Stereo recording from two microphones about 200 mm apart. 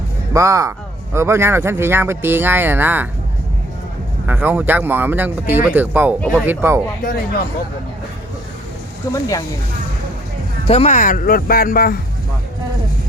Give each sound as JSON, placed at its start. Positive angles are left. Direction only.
{"t": 0.3, "sound": "speech", "side_deg": -15}
{"t": 4.3, "sound": "speech", "side_deg": -10}
{"t": 6.1, "sound": "speech", "side_deg": 5}
{"t": 6.4, "sound": "speech", "side_deg": -10}
{"t": 7.0, "sound": "speech", "side_deg": 45}
{"t": 9.1, "sound": "speech", "side_deg": 15}
{"t": 10.7, "sound": "speech", "side_deg": 30}